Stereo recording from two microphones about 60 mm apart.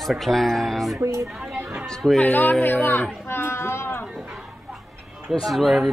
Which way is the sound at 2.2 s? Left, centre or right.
Left.